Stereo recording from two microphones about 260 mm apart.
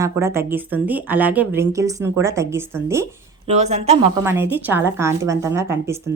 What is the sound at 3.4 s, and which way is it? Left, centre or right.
Speech, right.